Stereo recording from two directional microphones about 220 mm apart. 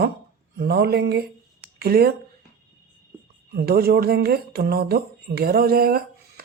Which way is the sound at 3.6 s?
45° right (ahead or behind).